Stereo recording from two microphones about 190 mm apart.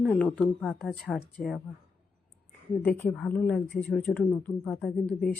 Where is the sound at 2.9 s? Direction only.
10° left (ahead or behind).